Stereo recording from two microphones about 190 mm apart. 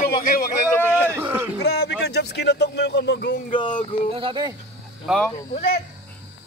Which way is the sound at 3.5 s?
25° left (ahead or behind).